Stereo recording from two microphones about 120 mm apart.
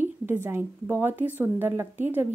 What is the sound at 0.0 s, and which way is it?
A woman's voice, 20° right (ahead or behind).